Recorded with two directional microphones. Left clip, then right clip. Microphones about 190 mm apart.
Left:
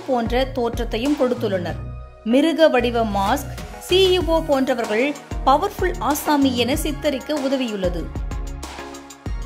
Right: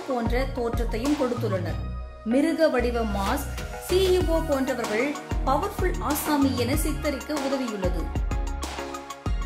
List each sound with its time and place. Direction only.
0.1 s speech: 20° left (ahead or behind)
1.0 s speech: centre (ahead or behind)
1.4 s speech: 20° left (ahead or behind)